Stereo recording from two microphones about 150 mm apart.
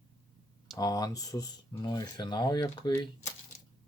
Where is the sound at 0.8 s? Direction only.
25° left (ahead or behind).